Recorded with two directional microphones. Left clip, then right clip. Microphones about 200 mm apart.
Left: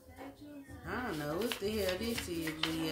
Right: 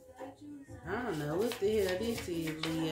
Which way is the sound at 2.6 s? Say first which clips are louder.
Left 3 dB; 5° right (ahead or behind).